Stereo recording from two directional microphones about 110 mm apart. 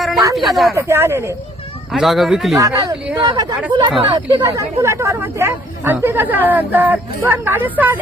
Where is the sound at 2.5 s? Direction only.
30° right (ahead or behind).